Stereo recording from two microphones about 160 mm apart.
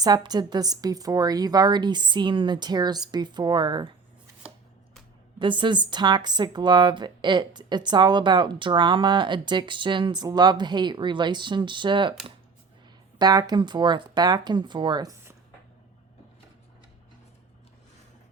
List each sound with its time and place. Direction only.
0.0 s a woman's voice: 25° right (ahead or behind)
5.4 s a woman's voice: 30° right (ahead or behind)
13.1 s a woman's voice: 25° right (ahead or behind)